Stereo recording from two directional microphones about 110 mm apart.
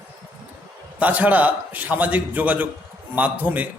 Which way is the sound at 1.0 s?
15° right (ahead or behind).